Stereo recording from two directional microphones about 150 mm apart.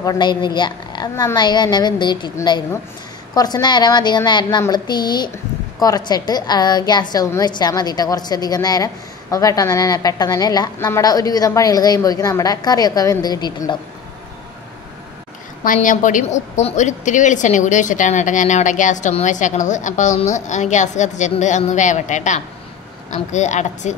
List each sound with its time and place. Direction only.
0.0 s a woman's voice: 25° left (ahead or behind)
15.6 s a woman's voice: 60° left (ahead or behind)